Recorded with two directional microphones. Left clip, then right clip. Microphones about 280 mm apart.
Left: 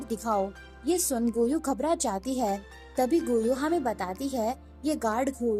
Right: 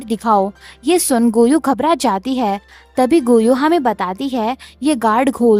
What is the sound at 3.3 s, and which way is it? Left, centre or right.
Speech, right.